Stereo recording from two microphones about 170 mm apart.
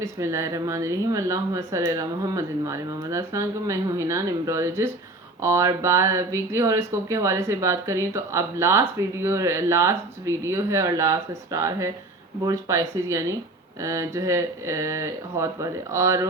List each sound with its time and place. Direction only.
0.0 s speech: 15° right (ahead or behind)